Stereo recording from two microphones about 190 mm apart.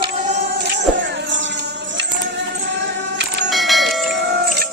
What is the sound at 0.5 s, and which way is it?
Music, 60° right (ahead or behind).